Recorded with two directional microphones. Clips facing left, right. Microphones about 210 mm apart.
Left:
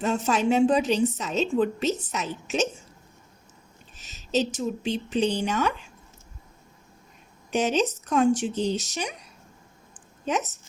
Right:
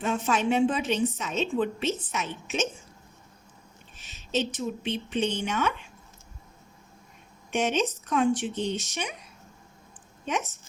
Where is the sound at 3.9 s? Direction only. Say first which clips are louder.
Left 4 dB; 40° left (ahead or behind).